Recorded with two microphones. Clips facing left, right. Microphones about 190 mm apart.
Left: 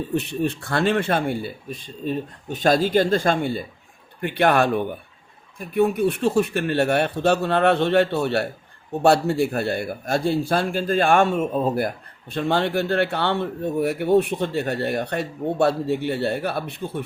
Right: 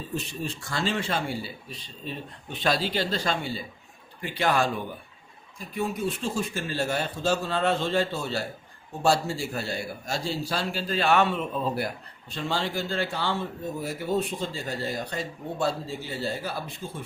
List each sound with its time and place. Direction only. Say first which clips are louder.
0.1 s speech: left 8 dB; 60° left (ahead or behind)